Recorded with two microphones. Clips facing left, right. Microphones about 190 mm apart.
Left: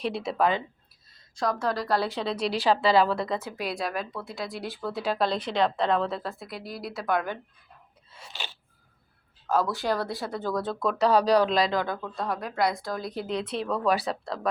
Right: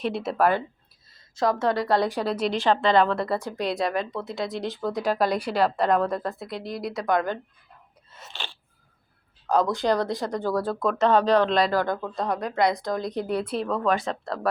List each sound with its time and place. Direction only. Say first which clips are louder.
0.0 s a woman's voice: right 3 dB; centre (ahead or behind)
1.9 s speech: right 4 dB; 15° right (ahead or behind)
2.5 s a woman's voice: even; 5° left (ahead or behind)
4.7 s a woman's voice: right 4 dB; 15° right (ahead or behind); by 7.3 s 5° left (ahead or behind)
9.5 s speech: right 3 dB; 20° right (ahead or behind)
9.7 s a woman's voice: right 5 dB; 5° left (ahead or behind)
10.4 s speech: right 3 dB; 10° right (ahead or behind)
11.0 s a woman's voice: right 1 dB; 5° left (ahead or behind)
13.1 s speech: right 4 dB; 15° right (ahead or behind)
13.6 s a woman's voice: left 1 dB; 5° left (ahead or behind)